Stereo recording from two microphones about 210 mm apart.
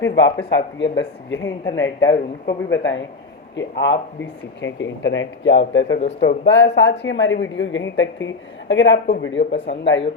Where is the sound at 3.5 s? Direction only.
55° left (ahead or behind).